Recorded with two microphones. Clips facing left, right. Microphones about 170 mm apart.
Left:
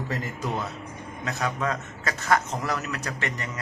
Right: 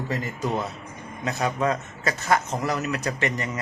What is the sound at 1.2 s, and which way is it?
A man's voice, 20° right (ahead or behind).